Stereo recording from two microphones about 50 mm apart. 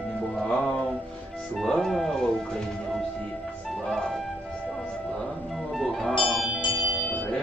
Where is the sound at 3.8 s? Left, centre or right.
Centre.